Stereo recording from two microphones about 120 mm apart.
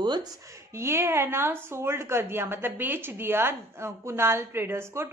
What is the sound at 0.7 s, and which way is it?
A woman's voice, 20° right (ahead or behind).